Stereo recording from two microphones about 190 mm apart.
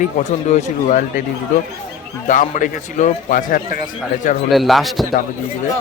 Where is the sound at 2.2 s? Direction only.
45° left (ahead or behind).